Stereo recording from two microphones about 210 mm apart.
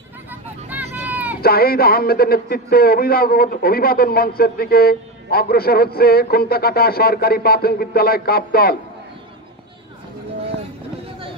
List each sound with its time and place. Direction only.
0.7 s vehicle: 10° right (ahead or behind)
1.4 s a man's voice: 45° left (ahead or behind)